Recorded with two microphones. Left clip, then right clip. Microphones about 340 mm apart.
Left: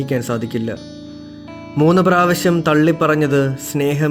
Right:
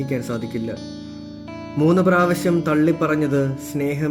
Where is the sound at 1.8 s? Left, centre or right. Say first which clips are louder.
Left 4 dB; left.